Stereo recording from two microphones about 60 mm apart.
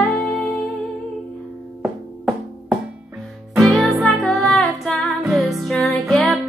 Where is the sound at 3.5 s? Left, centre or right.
Centre.